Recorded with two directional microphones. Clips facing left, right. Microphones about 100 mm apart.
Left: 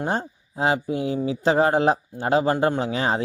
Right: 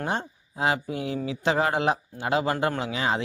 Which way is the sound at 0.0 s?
30° left (ahead or behind).